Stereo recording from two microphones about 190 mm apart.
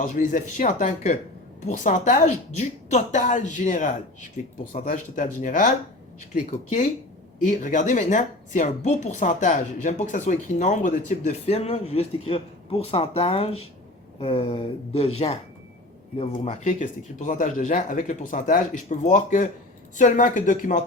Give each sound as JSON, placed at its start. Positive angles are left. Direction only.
{"t": 0.0, "sound": "a woman's voice", "side_deg": 40}
{"t": 16.1, "sound": "a woman's voice", "side_deg": 35}